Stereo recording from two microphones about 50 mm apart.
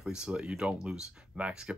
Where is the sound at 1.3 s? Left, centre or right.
Right.